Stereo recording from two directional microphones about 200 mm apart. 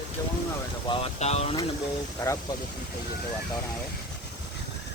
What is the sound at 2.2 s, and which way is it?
Speech, 15° left (ahead or behind).